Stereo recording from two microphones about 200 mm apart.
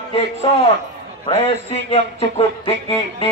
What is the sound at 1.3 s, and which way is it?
A man's voice, 30° left (ahead or behind).